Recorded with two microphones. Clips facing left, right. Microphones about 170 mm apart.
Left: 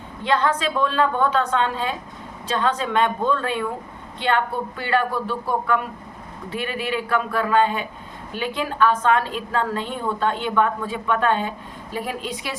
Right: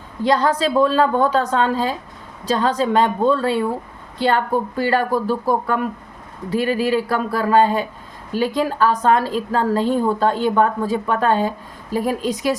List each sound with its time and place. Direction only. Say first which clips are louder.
0.2 s a woman's voice: right 4 dB; 35° right (ahead or behind)